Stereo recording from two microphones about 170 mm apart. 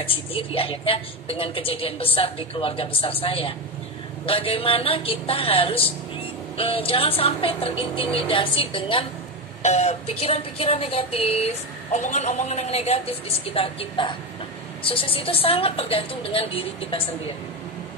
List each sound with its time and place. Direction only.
0.0 s speech: 35° left (ahead or behind)